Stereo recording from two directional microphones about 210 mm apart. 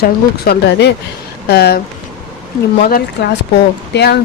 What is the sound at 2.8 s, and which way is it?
Speech, 50° left (ahead or behind).